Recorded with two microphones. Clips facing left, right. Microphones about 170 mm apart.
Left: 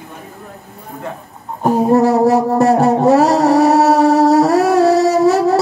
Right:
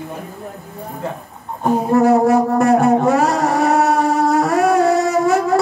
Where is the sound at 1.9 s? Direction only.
35° left (ahead or behind).